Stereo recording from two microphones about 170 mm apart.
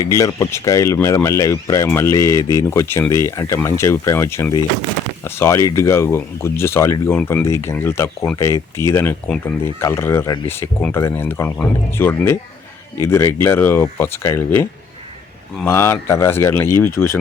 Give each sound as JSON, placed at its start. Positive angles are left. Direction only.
{"t": 0.2, "sound": "speech", "side_deg": 20}